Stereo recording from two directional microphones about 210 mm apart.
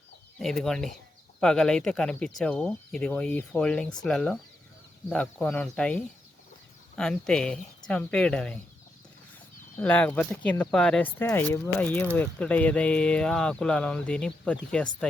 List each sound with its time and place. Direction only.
0.3 s speech: centre (ahead or behind)
9.7 s speech: 5° left (ahead or behind)